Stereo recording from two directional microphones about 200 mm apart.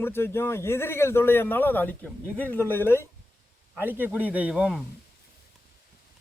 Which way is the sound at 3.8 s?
10° right (ahead or behind).